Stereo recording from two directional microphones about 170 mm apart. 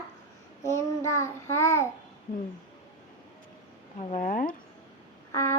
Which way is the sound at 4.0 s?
45° left (ahead or behind).